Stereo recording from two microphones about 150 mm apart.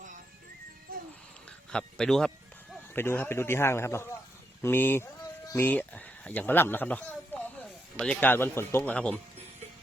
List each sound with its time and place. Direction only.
1.7 s speech: 5° left (ahead or behind)
2.9 s speech: 15° left (ahead or behind)
5.5 s a sound: 15° left (ahead or behind)
7.9 s speech: 5° left (ahead or behind)